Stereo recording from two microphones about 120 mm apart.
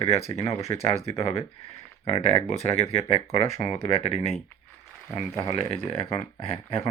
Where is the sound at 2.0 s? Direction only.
55° left (ahead or behind).